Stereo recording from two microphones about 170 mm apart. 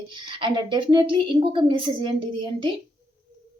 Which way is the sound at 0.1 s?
30° right (ahead or behind).